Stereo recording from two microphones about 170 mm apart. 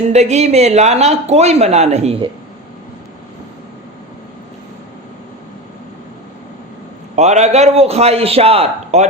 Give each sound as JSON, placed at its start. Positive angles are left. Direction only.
{"t": 0.1, "sound": "speech", "side_deg": -40}
{"t": 7.2, "sound": "speech", "side_deg": -40}